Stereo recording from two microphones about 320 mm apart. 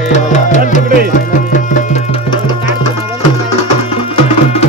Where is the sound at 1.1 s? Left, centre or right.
Left.